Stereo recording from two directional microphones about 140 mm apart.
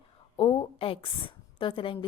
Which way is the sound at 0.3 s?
40° left (ahead or behind).